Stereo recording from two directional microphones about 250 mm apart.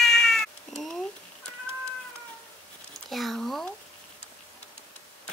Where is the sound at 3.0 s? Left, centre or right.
Centre.